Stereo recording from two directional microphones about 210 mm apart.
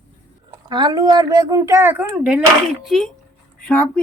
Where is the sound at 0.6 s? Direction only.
20° right (ahead or behind); by 3.9 s 5° left (ahead or behind).